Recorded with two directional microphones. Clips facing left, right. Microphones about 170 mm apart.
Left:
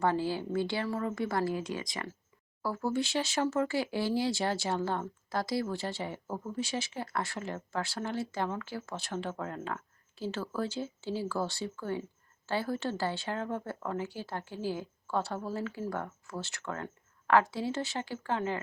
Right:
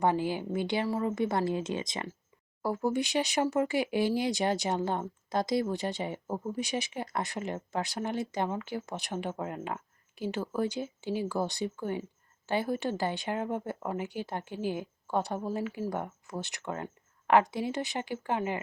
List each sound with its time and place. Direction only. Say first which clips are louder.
0.0 s a woman's voice: right 2 dB; 15° right (ahead or behind)